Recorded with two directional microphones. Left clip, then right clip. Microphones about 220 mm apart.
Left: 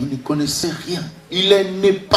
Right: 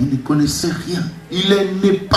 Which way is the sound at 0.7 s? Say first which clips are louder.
Right 2 dB; 5° left (ahead or behind).